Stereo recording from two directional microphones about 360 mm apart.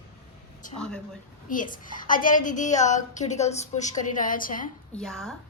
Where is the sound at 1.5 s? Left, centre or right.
Left.